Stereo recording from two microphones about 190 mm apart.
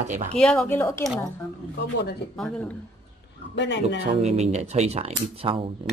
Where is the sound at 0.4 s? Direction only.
5° left (ahead or behind).